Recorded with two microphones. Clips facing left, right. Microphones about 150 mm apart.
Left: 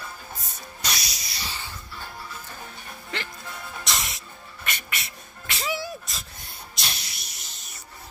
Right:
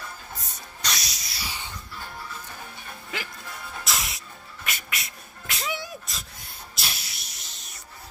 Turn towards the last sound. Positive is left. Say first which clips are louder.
# even
turn(degrees=0)  # may be behind; listen again after turning